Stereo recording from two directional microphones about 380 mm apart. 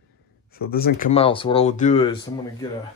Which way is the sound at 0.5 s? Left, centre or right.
Left.